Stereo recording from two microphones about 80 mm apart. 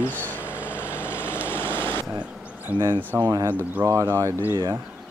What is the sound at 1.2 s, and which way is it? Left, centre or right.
Vehicle, left.